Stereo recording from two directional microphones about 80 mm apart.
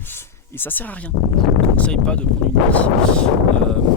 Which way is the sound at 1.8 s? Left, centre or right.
Centre.